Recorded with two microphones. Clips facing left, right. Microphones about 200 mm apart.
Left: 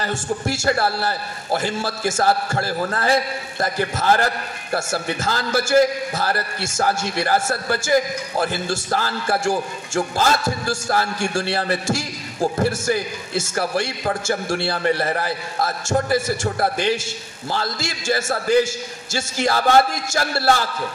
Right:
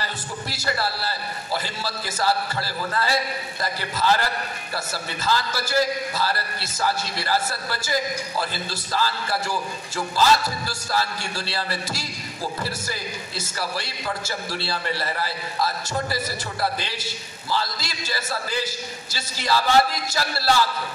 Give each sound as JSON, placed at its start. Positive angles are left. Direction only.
{"t": 0.0, "sound": "a man's voice", "side_deg": 50}